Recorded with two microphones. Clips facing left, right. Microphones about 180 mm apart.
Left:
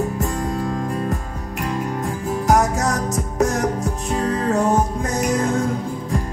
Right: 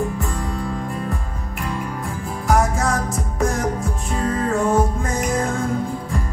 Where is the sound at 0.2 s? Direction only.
40° left (ahead or behind).